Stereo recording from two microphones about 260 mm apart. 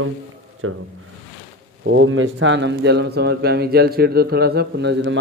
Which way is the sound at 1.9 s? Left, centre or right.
Right.